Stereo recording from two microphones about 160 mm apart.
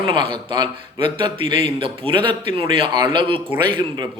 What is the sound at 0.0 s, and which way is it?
A man's voice, 35° right (ahead or behind).